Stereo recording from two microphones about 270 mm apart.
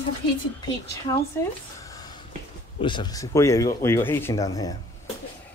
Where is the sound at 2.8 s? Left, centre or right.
Centre.